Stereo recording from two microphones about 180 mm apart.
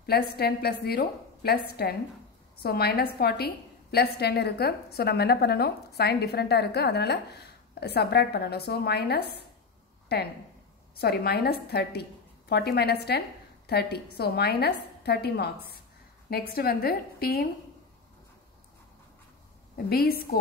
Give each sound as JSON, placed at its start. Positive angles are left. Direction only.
{"t": 0.0, "sound": "a woman's voice", "side_deg": 60}
{"t": 19.9, "sound": "a woman's voice", "side_deg": 60}